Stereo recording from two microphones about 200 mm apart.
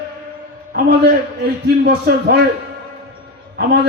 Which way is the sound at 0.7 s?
45° right (ahead or behind).